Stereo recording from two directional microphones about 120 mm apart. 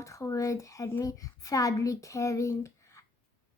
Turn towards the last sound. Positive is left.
turn(degrees=25)  # may be behind; listen again after turning